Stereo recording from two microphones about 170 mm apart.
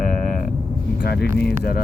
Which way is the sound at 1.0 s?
70° left (ahead or behind).